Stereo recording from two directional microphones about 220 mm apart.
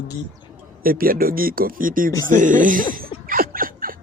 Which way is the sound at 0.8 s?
40° right (ahead or behind).